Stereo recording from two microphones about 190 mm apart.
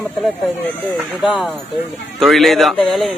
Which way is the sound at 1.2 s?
Centre (ahead or behind).